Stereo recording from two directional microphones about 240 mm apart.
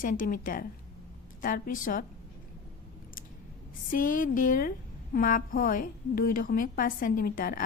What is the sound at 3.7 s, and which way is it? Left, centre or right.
A woman's voice, left.